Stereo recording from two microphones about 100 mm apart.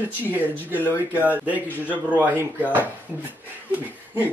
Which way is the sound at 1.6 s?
15° left (ahead or behind).